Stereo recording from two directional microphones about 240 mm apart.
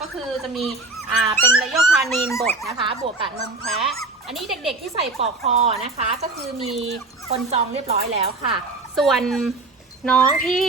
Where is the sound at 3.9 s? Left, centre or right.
Centre.